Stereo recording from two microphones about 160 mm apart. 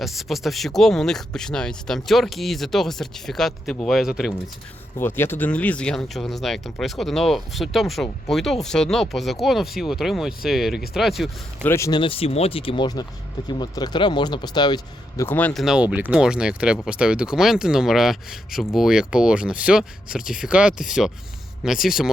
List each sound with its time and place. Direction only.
0.0 s speech: centre (ahead or behind)
4.9 s speech: 15° left (ahead or behind)
11.6 s speech: 15° left (ahead or behind)
11.9 s speech: 30° left (ahead or behind); by 15.6 s 10° left (ahead or behind)
15.6 s speech: 5° right (ahead or behind)